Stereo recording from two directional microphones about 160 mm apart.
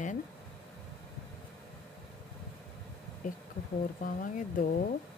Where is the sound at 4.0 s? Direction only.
55° left (ahead or behind).